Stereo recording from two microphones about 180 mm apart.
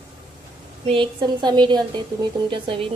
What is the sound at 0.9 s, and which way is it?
A woman's voice, 30° right (ahead or behind).